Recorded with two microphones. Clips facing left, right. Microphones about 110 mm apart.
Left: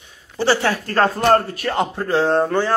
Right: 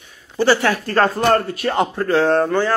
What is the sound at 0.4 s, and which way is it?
Speech, 30° left (ahead or behind).